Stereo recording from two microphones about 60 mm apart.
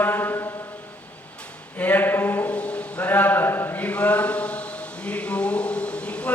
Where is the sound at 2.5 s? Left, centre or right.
Left.